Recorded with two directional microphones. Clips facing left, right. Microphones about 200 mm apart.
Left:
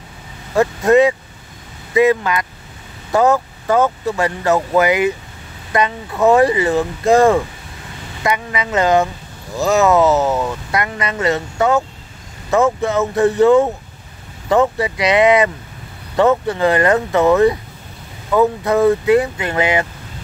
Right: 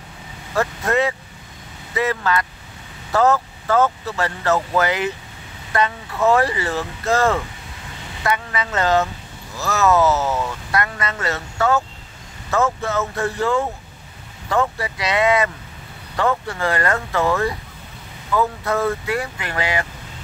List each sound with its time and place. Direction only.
0.6 s speech: 20° left (ahead or behind)